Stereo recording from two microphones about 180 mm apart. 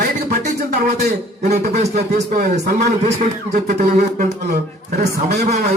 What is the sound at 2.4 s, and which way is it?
Speech, 65° right (ahead or behind).